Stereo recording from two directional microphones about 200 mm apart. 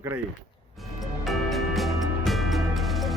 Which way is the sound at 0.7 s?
Centre (ahead or behind).